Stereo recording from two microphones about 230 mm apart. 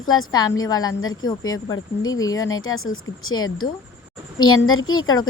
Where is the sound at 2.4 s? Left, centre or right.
Left.